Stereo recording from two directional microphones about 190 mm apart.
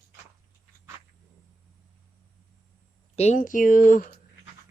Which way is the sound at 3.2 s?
40° left (ahead or behind).